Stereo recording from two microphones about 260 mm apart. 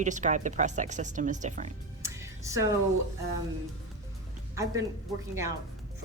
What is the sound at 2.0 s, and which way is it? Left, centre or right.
Music, centre.